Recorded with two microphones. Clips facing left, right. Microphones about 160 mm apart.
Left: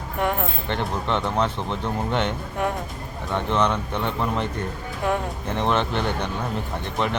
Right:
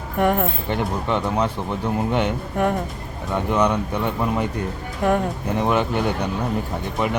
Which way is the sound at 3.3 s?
10° right (ahead or behind).